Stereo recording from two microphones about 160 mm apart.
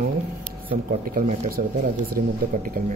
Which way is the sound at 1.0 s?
60° right (ahead or behind).